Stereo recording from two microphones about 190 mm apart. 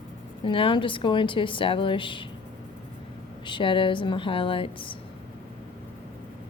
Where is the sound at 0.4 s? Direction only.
25° left (ahead or behind).